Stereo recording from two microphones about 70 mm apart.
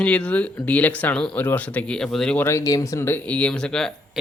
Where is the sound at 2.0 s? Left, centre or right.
Centre.